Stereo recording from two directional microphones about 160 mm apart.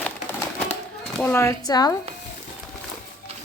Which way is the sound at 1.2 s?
15° left (ahead or behind).